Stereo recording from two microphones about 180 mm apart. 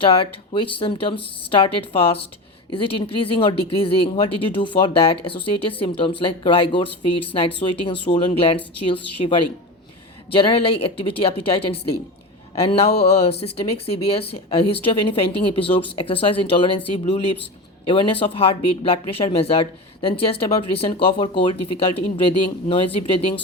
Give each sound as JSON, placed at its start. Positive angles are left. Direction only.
{"t": 0.0, "sound": "speech", "side_deg": 30}
{"t": 13.1, "sound": "speech", "side_deg": 35}